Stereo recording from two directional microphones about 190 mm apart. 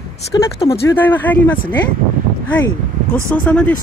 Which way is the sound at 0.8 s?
10° left (ahead or behind).